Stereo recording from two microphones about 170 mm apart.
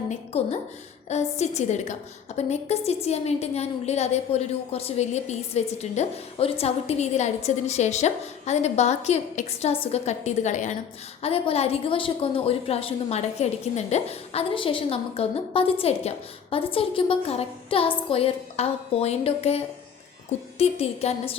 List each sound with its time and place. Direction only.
0.1 s a woman's voice: 40° left (ahead or behind)